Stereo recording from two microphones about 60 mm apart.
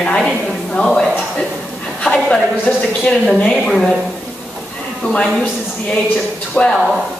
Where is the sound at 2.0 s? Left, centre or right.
Centre.